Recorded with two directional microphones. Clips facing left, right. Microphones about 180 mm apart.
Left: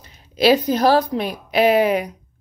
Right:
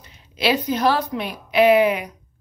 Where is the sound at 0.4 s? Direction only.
40° left (ahead or behind).